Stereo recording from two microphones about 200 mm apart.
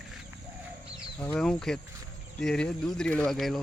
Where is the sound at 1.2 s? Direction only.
5° left (ahead or behind).